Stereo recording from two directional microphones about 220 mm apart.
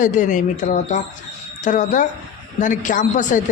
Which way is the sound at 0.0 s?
35° left (ahead or behind).